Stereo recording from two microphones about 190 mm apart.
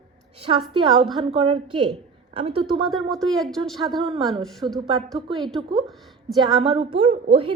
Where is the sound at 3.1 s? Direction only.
Centre (ahead or behind).